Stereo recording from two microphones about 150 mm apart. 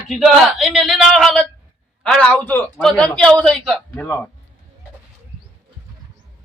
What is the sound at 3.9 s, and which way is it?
Speech, 20° left (ahead or behind).